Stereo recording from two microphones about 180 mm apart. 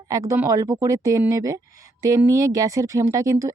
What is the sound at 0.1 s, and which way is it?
A woman's voice, 15° right (ahead or behind).